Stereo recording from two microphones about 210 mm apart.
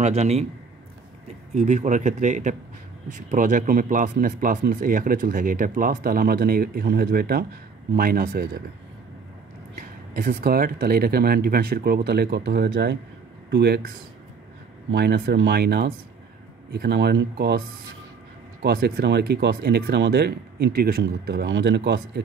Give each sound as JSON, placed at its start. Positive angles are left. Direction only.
{"t": 0.0, "sound": "speech", "side_deg": -30}
{"t": 1.5, "sound": "speech", "side_deg": -35}
{"t": 10.1, "sound": "speech", "side_deg": -45}